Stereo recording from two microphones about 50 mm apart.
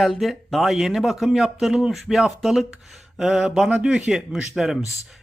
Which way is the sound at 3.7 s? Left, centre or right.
Centre.